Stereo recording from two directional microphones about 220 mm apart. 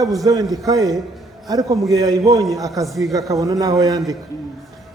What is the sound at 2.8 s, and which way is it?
Speech, centre (ahead or behind).